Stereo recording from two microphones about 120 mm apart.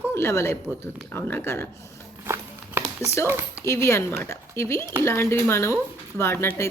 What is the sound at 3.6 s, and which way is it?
A woman's voice, 25° left (ahead or behind).